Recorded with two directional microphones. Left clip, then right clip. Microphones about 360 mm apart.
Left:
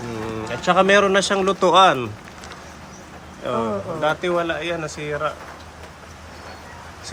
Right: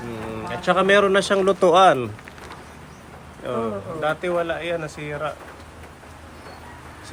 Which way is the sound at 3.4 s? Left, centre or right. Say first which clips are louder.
Left 3 dB; centre.